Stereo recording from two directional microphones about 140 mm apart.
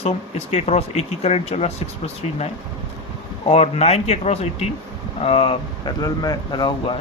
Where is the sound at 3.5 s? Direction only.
45° left (ahead or behind).